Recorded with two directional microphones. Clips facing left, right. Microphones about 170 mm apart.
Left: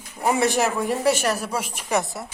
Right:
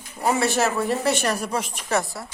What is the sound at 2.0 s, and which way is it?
Speech, 20° left (ahead or behind).